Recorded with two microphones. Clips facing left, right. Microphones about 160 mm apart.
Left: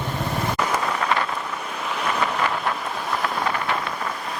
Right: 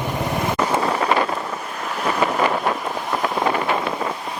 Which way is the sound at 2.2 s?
25° right (ahead or behind).